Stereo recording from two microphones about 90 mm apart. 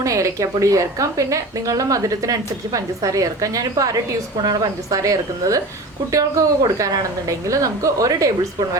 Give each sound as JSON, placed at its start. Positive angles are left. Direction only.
{"t": 0.0, "sound": "a woman's voice", "side_deg": -40}